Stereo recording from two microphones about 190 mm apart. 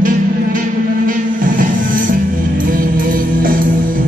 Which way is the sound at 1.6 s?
45° right (ahead or behind).